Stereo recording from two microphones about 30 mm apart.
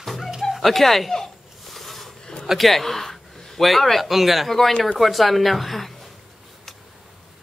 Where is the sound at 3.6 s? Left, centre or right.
Centre.